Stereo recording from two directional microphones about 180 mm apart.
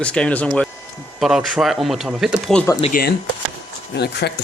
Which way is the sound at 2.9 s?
60° left (ahead or behind).